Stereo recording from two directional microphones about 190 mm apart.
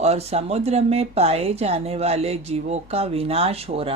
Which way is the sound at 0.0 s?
35° right (ahead or behind).